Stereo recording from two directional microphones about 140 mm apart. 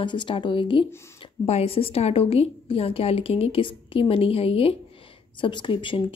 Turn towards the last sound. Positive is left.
turn(degrees=35)  # may be behind; listen again after turning